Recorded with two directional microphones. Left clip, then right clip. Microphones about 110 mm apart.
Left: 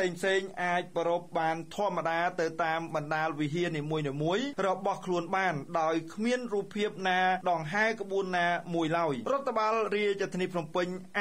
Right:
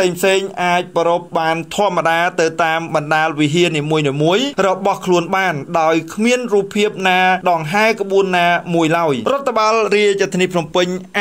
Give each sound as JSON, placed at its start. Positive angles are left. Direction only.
{"t": 0.0, "sound": "speech", "side_deg": -20}